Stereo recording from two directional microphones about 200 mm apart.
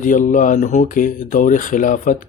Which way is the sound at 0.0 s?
40° left (ahead or behind).